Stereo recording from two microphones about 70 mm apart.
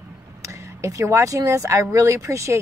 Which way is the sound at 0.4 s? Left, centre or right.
Right.